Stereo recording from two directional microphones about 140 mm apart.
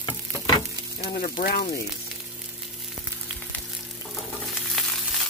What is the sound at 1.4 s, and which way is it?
Speech, 90° left.